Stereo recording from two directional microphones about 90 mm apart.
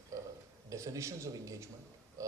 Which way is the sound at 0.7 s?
35° right (ahead or behind).